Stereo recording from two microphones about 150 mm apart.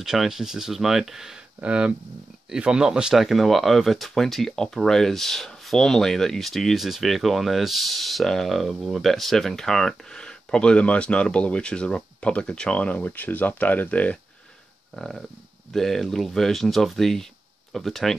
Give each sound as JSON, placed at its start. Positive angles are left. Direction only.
{"t": 0.0, "sound": "speech", "side_deg": -5}